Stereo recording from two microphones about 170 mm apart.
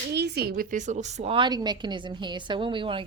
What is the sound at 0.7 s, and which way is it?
A woman's voice, 45° right (ahead or behind).